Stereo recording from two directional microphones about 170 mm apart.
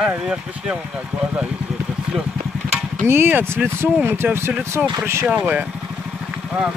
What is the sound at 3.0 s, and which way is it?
Speech, 15° right (ahead or behind).